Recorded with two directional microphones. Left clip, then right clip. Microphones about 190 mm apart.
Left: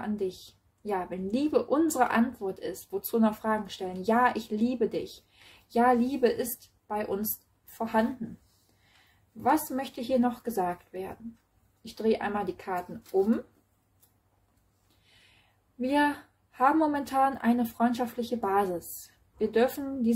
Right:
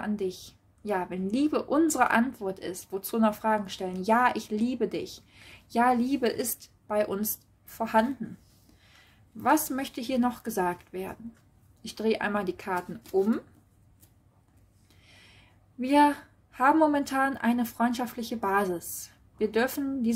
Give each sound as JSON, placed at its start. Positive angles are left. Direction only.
{"t": 0.0, "sound": "a woman's voice", "side_deg": -35}
{"t": 9.4, "sound": "a woman's voice", "side_deg": -40}
{"t": 15.8, "sound": "a woman's voice", "side_deg": -35}